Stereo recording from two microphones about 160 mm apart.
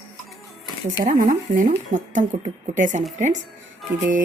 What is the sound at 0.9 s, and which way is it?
Speech, 55° right (ahead or behind).